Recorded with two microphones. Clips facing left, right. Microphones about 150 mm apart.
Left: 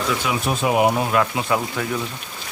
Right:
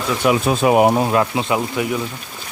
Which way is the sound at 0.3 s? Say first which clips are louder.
Right 9 dB; 55° right (ahead or behind).